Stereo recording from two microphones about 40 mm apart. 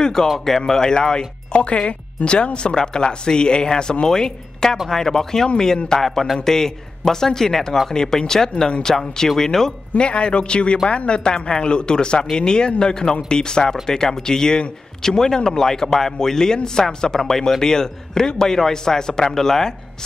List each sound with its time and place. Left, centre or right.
0.0 s speech: centre
6.0 s speech: centre
9.9 s speech: left; by 19.7 s centre